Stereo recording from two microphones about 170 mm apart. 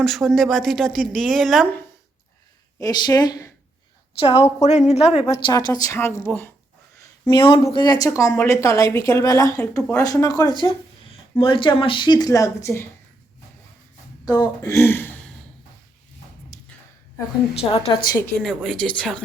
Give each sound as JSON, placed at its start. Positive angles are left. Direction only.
{"t": 0.0, "sound": "speech", "side_deg": 0}
{"t": 2.8, "sound": "speech", "side_deg": 25}
{"t": 4.2, "sound": "a woman's voice", "side_deg": 35}
{"t": 5.5, "sound": "a woman's voice", "side_deg": 20}
{"t": 6.9, "sound": "a sound", "side_deg": 20}
{"t": 7.3, "sound": "speech", "side_deg": 30}
{"t": 14.3, "sound": "a woman's voice", "side_deg": 20}
{"t": 17.5, "sound": "speech", "side_deg": 35}
{"t": 18.3, "sound": "speech", "side_deg": 0}